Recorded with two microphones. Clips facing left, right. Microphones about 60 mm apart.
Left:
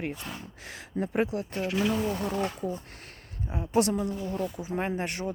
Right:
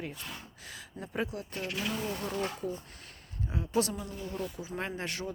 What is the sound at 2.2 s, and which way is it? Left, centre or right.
Speech, left.